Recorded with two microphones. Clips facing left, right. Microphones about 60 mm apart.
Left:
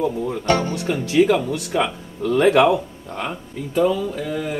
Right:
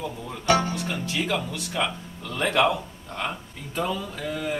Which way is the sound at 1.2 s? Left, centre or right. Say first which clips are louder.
Left 13 dB; left.